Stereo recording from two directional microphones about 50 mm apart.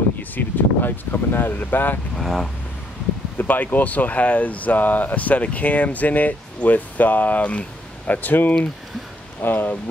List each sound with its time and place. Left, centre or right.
0.2 s speech: left
2.1 s speech: centre
3.3 s speech: left